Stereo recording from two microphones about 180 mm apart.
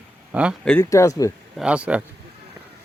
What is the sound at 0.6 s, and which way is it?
Speech, 5° left (ahead or behind).